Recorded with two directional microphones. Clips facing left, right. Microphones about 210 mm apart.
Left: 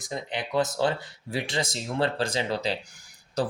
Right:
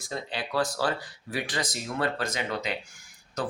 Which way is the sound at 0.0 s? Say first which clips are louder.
Left 2 dB; 20° left (ahead or behind).